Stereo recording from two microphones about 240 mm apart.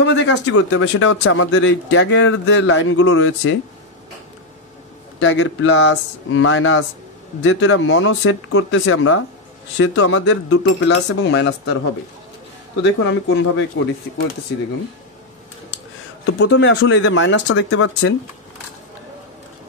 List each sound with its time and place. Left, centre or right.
0.0 s speech: left
5.2 s speech: left
12.8 s speech: left
16.3 s speech: left